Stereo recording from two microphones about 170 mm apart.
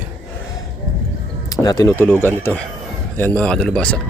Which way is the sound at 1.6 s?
20° left (ahead or behind).